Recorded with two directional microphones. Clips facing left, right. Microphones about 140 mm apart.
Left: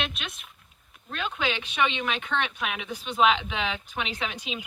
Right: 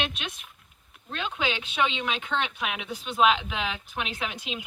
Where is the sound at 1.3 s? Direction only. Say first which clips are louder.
Even; 10° right (ahead or behind).